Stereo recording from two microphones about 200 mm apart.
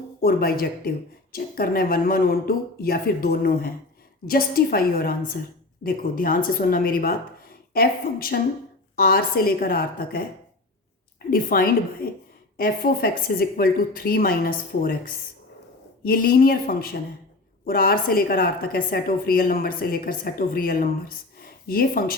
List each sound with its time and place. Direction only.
0.2 s a woman's voice: 50° left (ahead or behind)
11.3 s a woman's voice: 45° left (ahead or behind)